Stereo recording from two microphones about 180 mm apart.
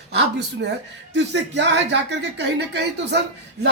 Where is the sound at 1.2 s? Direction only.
75° right (ahead or behind).